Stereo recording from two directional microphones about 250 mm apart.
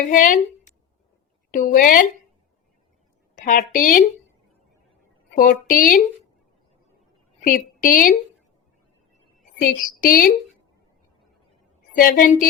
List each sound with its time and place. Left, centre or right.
0.1 s a woman's voice: left
1.5 s a woman's voice: left
3.3 s a woman's voice: left
5.3 s a woman's voice: left
7.4 s a woman's voice: left
9.6 s a woman's voice: left
11.9 s a woman's voice: left